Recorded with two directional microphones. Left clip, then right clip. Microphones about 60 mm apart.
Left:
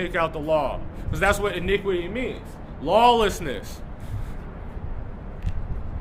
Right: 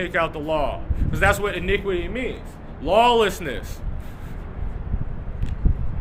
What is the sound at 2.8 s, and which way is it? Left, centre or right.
Speech, left.